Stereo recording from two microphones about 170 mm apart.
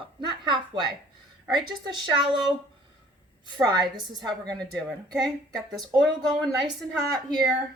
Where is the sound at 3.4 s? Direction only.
25° right (ahead or behind).